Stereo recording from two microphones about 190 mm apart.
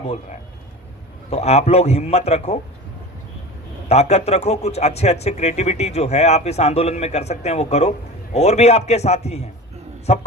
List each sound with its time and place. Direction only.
1.3 s a man's voice: 35° left (ahead or behind)
3.8 s a man's voice: 35° left (ahead or behind)